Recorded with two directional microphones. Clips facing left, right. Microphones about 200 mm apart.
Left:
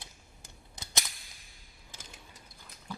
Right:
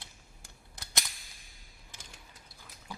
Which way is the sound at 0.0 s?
20° left (ahead or behind).